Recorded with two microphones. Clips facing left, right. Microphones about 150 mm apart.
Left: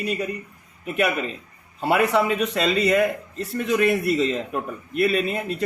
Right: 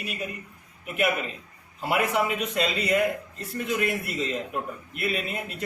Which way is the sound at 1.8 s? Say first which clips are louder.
Left 5 dB; 70° left (ahead or behind).